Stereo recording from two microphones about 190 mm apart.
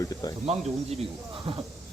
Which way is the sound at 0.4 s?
35° right (ahead or behind).